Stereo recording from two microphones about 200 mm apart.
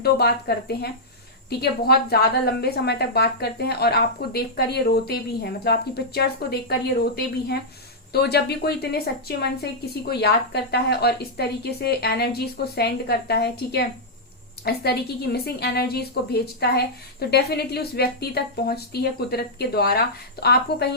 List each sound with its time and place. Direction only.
0.0 s a woman's voice: 55° left (ahead or behind)